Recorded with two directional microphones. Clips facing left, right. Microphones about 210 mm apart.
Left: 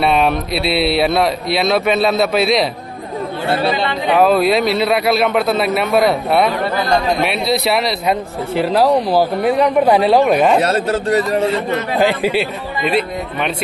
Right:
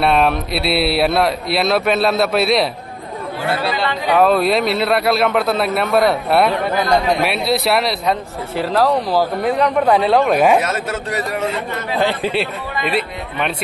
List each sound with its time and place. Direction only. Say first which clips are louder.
0.0 s speech: left 1 dB; centre (ahead or behind)
3.4 s speech: left 2 dB; 25° left (ahead or behind)
4.2 s speech: left 2 dB; centre (ahead or behind)
8.5 s a man's voice: left 3 dB; 20° left (ahead or behind)
10.6 s a man's voice: left 6 dB; 35° left (ahead or behind)
12.0 s speech: left 2 dB; 5° left (ahead or behind)